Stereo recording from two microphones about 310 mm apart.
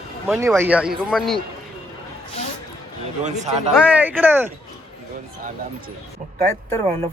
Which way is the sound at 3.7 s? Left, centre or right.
Centre.